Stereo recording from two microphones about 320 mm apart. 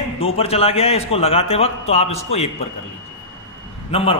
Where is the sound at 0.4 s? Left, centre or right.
Centre.